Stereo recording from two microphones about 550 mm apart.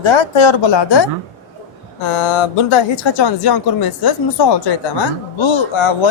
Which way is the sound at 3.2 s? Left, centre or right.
Left.